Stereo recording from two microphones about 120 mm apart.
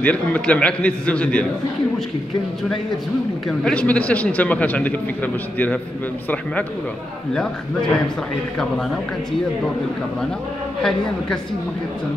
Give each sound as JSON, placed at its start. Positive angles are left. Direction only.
{"t": 0.0, "sound": "a man's voice", "side_deg": 10}
{"t": 3.4, "sound": "a man's voice", "side_deg": 10}
{"t": 10.8, "sound": "a man's voice", "side_deg": 5}